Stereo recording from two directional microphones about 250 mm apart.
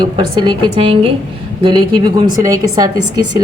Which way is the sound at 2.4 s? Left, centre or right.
Centre.